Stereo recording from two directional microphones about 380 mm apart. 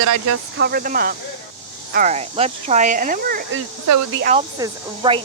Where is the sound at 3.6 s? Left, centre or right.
Right.